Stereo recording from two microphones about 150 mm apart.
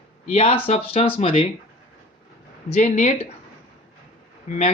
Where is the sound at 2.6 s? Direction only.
45° left (ahead or behind).